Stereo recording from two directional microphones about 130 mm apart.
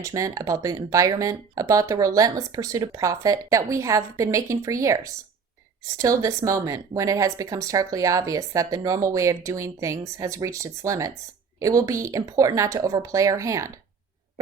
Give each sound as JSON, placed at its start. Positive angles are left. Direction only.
{"t": 0.0, "sound": "speech", "side_deg": -25}